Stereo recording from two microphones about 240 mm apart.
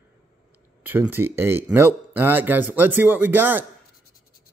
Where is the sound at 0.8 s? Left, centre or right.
Centre.